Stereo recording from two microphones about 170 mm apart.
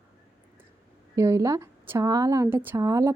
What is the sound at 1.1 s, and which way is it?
A woman's voice, 20° right (ahead or behind).